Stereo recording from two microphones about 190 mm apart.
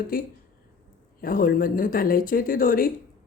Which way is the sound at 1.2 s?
50° left (ahead or behind).